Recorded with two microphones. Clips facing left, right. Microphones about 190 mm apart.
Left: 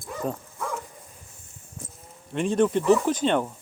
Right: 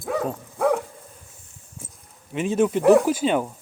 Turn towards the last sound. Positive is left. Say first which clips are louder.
# right 2 dB
turn(degrees=-5)  # may be behind; listen again after turning